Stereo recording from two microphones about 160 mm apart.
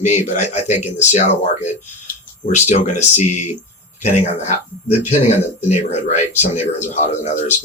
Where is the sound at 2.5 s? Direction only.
45° left (ahead or behind).